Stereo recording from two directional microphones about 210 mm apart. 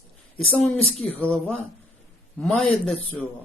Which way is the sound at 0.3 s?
5° left (ahead or behind).